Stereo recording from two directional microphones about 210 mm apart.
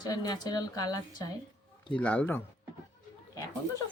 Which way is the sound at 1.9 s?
5° left (ahead or behind).